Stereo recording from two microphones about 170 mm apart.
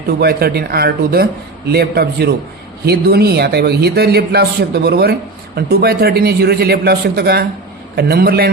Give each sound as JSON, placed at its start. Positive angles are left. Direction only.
{"t": 0.2, "sound": "a man's voice", "side_deg": -65}